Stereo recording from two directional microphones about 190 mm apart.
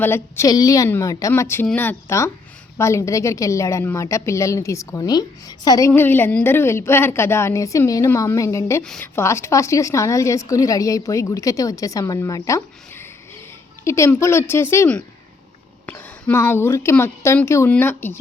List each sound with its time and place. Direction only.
0.0 s a woman's voice: 15° left (ahead or behind)